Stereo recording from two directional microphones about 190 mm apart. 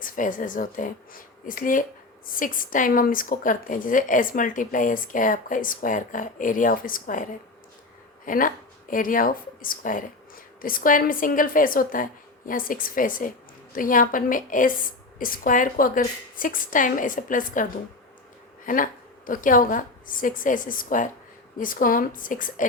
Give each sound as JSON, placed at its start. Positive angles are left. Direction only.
{"t": 0.0, "sound": "a woman's voice", "side_deg": 45}